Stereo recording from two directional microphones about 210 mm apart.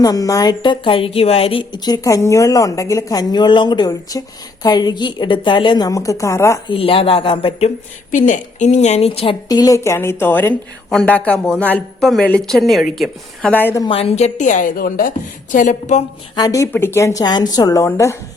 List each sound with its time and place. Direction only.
0.0 s a woman's voice: 15° left (ahead or behind)
6.7 s a woman's voice: 25° left (ahead or behind)
8.1 s a woman's voice: 40° left (ahead or behind); by 13.8 s 10° left (ahead or behind)
13.8 s a woman's voice: 25° left (ahead or behind)
16.3 s a woman's voice: 15° left (ahead or behind)